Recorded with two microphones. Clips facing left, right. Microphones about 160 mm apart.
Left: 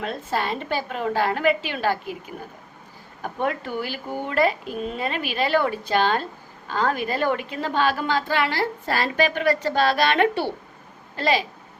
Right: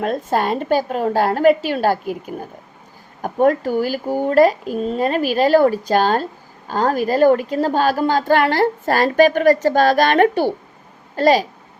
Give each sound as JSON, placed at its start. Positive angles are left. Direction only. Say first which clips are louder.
{"t": 0.0, "sound": "a woman's voice", "louder": "right 7 dB", "side_deg": -45}